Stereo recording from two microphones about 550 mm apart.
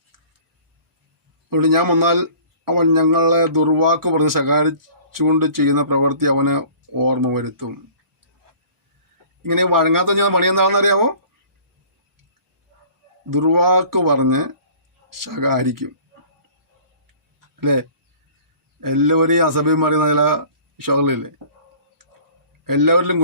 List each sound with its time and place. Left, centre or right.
1.5 s a man's voice: right
9.4 s a man's voice: right
13.3 s a man's voice: right
17.6 s a man's voice: right
22.6 s a man's voice: right